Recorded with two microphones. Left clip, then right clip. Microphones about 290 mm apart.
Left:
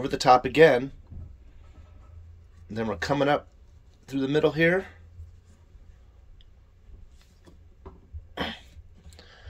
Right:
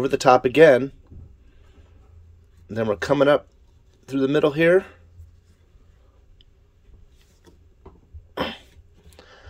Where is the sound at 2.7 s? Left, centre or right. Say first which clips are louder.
Right 6 dB; centre.